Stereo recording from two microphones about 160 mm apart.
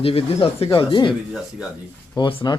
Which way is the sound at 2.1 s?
30° left (ahead or behind).